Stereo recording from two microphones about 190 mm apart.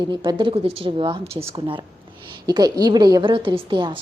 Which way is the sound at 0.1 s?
25° right (ahead or behind).